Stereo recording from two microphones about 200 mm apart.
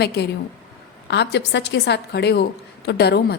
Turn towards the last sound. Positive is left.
turn(degrees=55)  # may be behind; listen again after turning